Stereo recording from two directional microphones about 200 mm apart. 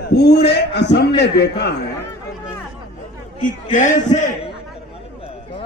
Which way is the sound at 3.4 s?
40° left (ahead or behind).